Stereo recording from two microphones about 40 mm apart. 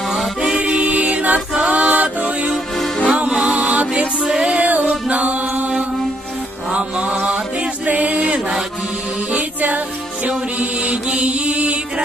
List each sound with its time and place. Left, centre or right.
0.1 s music: centre
0.5 s music: right
3.1 s music: right
4.5 s music: right
6.7 s music: right
10.2 s mantra: right